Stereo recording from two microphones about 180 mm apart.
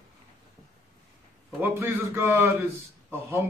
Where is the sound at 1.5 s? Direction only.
10° right (ahead or behind).